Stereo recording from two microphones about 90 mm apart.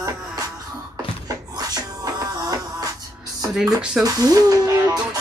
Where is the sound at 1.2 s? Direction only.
45° right (ahead or behind).